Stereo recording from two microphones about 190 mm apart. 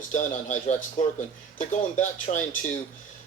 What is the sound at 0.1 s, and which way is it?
Speech, 40° left (ahead or behind).